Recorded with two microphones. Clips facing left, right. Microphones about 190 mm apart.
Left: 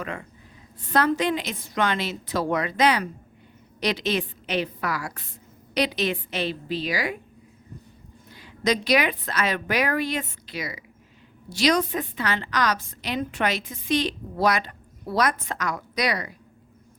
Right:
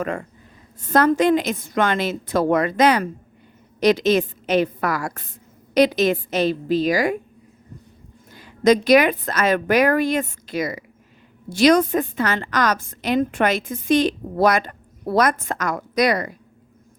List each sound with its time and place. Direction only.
0.0 s a woman's voice: 45° right (ahead or behind)
8.4 s a woman's voice: 50° right (ahead or behind)